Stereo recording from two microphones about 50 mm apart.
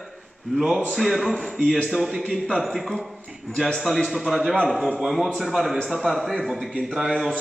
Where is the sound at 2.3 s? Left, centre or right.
Centre.